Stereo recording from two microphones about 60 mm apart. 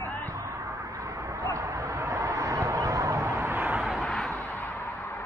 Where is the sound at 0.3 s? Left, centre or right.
Right.